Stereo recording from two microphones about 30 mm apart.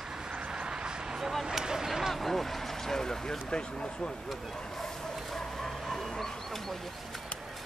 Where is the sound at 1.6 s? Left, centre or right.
Centre.